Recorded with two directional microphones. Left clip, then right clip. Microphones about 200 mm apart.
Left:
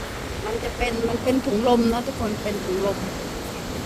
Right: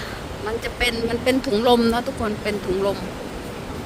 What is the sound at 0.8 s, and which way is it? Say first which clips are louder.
Speech: right 3 dB; 30° right (ahead or behind).